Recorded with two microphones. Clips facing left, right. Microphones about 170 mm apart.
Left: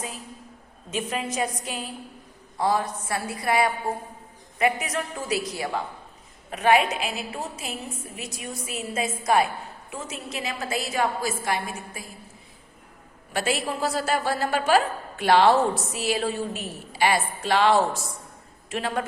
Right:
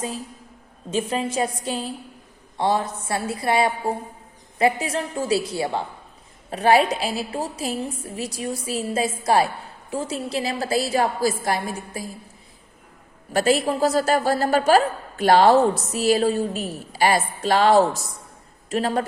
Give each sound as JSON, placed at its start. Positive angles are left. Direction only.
{"t": 0.9, "sound": "a woman's voice", "side_deg": -30}
{"t": 13.3, "sound": "a woman's voice", "side_deg": -40}